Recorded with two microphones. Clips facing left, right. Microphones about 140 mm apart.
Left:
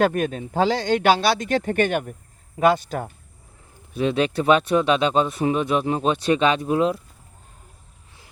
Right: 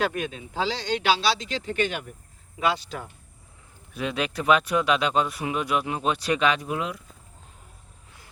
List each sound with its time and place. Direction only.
0.0 s speech: 50° left (ahead or behind)
3.9 s speech: 30° left (ahead or behind)